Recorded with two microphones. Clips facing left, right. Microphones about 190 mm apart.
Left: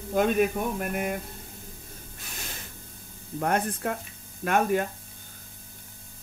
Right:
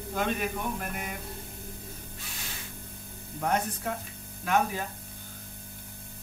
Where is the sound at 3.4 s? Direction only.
55° left (ahead or behind).